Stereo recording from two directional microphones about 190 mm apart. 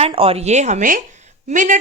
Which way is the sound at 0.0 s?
30° right (ahead or behind).